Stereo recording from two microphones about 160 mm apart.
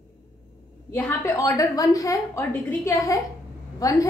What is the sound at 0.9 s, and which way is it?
A woman's voice, 15° left (ahead or behind).